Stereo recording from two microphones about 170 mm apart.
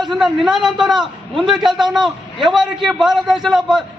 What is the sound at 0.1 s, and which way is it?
A man's voice, centre (ahead or behind).